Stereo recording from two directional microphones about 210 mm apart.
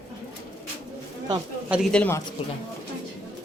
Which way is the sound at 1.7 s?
Centre (ahead or behind).